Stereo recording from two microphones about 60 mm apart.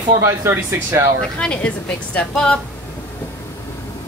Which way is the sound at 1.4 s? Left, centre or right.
Centre.